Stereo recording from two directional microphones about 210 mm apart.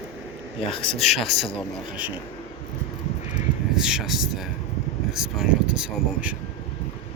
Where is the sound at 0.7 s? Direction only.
25° left (ahead or behind).